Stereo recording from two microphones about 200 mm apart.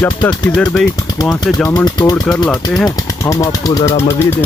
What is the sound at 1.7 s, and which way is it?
Speech, 20° left (ahead or behind).